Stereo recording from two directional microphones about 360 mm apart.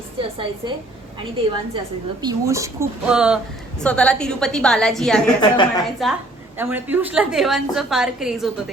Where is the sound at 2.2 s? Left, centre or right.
Centre.